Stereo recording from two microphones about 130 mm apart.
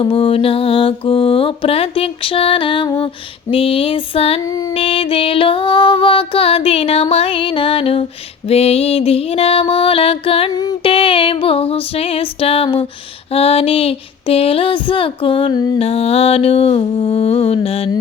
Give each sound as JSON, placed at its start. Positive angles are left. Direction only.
{"t": 0.0, "sound": "music", "side_deg": 45}
{"t": 4.4, "sound": "female singing", "side_deg": 30}
{"t": 4.7, "sound": "music", "side_deg": 45}
{"t": 15.8, "sound": "music", "side_deg": 50}